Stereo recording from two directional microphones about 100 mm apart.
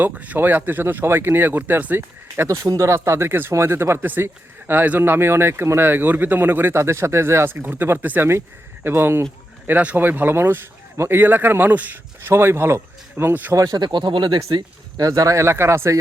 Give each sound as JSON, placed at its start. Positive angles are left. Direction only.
{"t": 0.0, "sound": "speech", "side_deg": -15}
{"t": 13.5, "sound": "speech", "side_deg": -40}
{"t": 14.9, "sound": "speech", "side_deg": -35}